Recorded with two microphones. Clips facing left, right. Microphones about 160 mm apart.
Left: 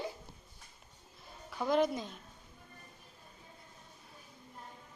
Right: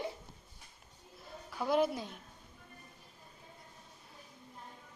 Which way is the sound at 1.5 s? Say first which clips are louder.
Left 1 dB; 5° right (ahead or behind).